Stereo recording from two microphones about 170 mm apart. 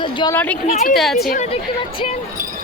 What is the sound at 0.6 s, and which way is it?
Speech, 40° left (ahead or behind).